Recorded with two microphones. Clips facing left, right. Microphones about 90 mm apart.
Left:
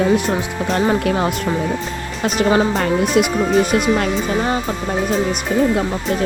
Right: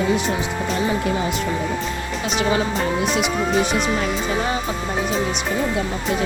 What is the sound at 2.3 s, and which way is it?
Speech, 40° left (ahead or behind).